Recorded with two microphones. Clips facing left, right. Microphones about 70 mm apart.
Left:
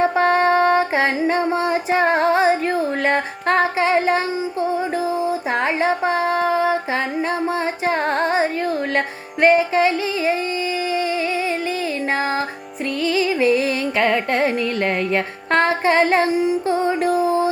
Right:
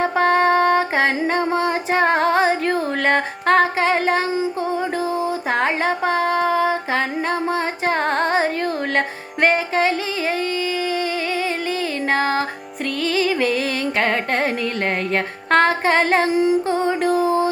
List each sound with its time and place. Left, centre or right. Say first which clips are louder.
0.2 s music: right 2 dB; right
5.5 s a sound: even; right
7.9 s carnatic music: even; right
9.0 s music: even; right
13.1 s music: left 2 dB; right
14.0 s carnatic music: left 3 dB; right
15.1 s music: right 1 dB; right